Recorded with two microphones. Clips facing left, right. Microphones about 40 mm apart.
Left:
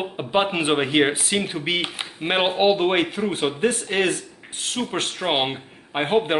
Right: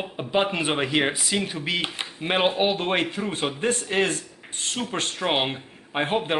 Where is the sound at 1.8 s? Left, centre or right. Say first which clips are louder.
Left 2 dB; centre.